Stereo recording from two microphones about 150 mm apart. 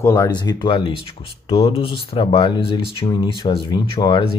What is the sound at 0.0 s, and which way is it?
Speech, 20° left (ahead or behind).